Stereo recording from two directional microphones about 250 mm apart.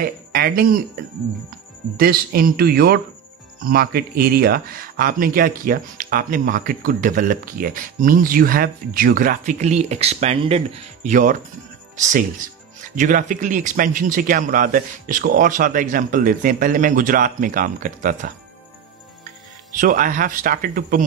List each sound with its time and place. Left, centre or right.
0.0 s speech: right
2.0 s speech: right
12.9 s speech: right
19.8 s speech: right